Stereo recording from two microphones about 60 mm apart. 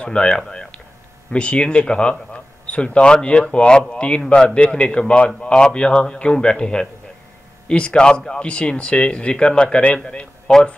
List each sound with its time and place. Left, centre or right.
0.0 s a man's voice: centre